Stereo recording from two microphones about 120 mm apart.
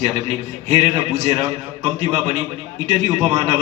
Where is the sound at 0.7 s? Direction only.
55° right (ahead or behind).